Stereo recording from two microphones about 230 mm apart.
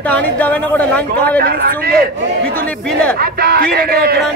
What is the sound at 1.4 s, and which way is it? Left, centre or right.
Speech, right.